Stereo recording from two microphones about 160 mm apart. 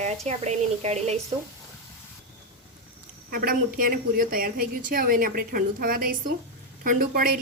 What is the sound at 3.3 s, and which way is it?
A woman's voice, 65° right (ahead or behind).